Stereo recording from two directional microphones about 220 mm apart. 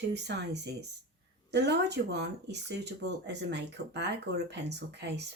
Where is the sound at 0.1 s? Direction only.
50° right (ahead or behind).